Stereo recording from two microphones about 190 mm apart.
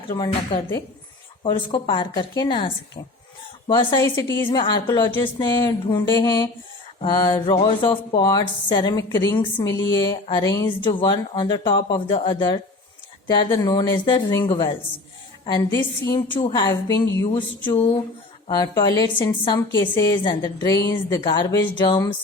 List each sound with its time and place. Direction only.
0.1 s a woman's voice: 20° left (ahead or behind)
17.3 s a woman's voice: 25° left (ahead or behind)